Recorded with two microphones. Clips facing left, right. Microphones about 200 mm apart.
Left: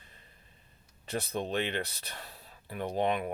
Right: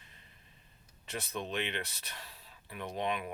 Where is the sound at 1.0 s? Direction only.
35° left (ahead or behind).